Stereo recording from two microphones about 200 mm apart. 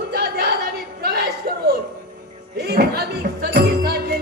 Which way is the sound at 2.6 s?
55° right (ahead or behind).